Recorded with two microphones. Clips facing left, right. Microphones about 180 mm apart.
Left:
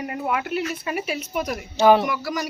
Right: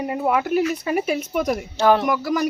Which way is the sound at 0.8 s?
45° right (ahead or behind).